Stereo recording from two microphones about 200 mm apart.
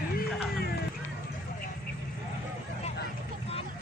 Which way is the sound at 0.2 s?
50° left (ahead or behind).